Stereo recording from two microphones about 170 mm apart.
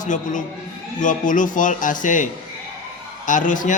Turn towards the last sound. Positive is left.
turn(degrees=50)  # may be behind; listen again after turning